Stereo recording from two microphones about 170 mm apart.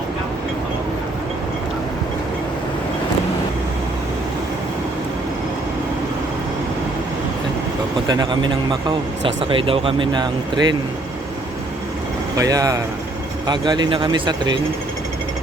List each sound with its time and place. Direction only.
8.0 s speech: 25° right (ahead or behind)
12.4 s speech: 20° right (ahead or behind)